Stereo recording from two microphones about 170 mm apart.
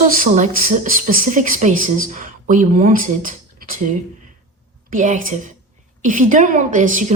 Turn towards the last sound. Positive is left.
turn(degrees=-50)  # may be behind; listen again after turning